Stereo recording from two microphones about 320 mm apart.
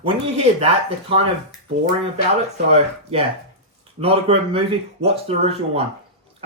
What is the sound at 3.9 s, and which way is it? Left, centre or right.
A man's voice, centre.